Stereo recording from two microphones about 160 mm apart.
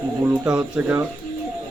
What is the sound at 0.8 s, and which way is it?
Speech, 5° right (ahead or behind).